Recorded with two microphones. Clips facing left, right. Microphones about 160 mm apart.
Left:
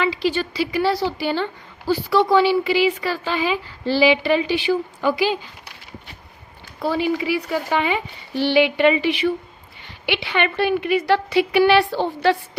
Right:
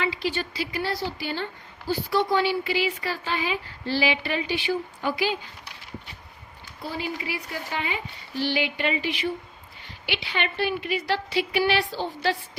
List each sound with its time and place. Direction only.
0.0 s a woman's voice: 90° left
6.8 s a woman's voice: 80° left; by 12.4 s 60° left (ahead or behind)